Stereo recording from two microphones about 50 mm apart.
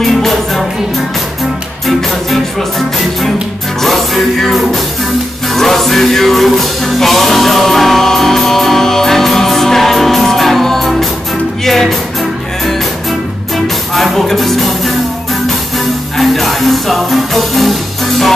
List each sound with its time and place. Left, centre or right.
0.0 s music: centre
3.8 s music: centre
13.9 s music: centre
16.2 s music: centre